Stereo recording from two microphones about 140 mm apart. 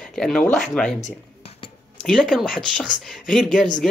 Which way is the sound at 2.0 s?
5° left (ahead or behind).